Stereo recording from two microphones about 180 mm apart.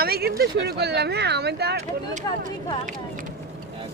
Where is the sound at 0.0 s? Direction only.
60° right (ahead or behind).